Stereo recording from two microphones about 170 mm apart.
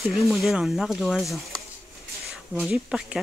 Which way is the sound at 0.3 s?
Centre (ahead or behind).